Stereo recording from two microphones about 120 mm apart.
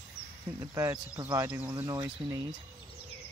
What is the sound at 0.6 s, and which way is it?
Speech, 20° right (ahead or behind).